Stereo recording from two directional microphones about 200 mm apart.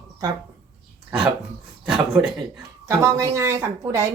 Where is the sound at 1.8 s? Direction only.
Centre (ahead or behind).